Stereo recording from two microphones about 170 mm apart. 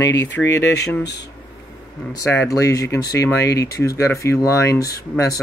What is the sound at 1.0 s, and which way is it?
Speech, 90° left.